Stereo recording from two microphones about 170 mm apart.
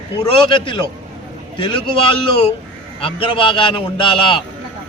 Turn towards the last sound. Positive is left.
turn(degrees=30)  # may be behind; listen again after turning